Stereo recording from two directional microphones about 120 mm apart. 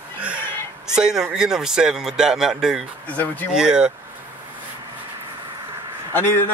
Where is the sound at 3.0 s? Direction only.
15° left (ahead or behind).